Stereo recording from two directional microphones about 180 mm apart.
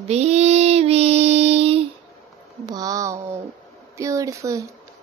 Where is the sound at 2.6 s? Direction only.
20° right (ahead or behind).